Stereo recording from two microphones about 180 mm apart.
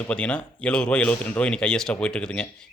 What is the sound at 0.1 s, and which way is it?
A man's voice, 5° left (ahead or behind).